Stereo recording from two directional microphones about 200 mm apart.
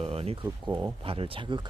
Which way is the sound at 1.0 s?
25° right (ahead or behind).